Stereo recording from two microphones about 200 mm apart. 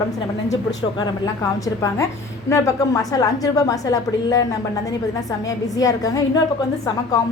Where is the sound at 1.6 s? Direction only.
15° left (ahead or behind).